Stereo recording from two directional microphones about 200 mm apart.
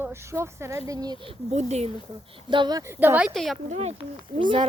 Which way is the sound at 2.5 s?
20° right (ahead or behind).